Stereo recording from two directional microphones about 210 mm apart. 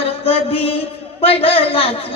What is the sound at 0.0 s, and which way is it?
Music, 30° left (ahead or behind).